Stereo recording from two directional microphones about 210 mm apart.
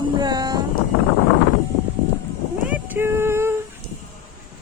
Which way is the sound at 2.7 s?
10° right (ahead or behind).